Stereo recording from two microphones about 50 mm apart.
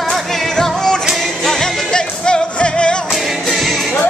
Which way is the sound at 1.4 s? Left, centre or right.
Centre.